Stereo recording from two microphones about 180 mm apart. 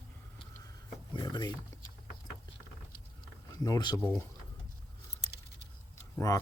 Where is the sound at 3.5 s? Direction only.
20° left (ahead or behind).